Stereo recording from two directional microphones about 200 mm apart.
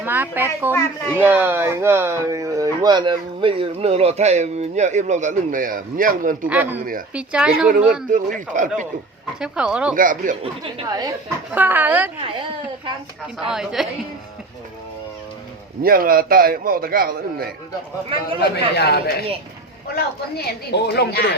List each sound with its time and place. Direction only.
0.0 s a woman's voice: 10° right (ahead or behind); by 6.5 s 40° right (ahead or behind)
6.5 s a woman's voice: 10° right (ahead or behind)
8.1 s speech: 40° right (ahead or behind)
9.4 s a woman's voice: 5° right (ahead or behind)
9.9 s speech: 40° right (ahead or behind)
10.4 s speech: 25° right (ahead or behind)
11.5 s a woman's voice: 10° right (ahead or behind)
12.2 s speech: 25° right (ahead or behind)
13.4 s a woman's voice: 5° right (ahead or behind)
15.8 s a man's voice: 45° right (ahead or behind)
18.1 s speech: 25° right (ahead or behind)
18.4 s a man's voice: 55° left (ahead or behind)
20.3 s a woman's voice: 55° left (ahead or behind)